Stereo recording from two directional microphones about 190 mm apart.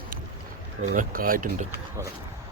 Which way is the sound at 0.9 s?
45° right (ahead or behind).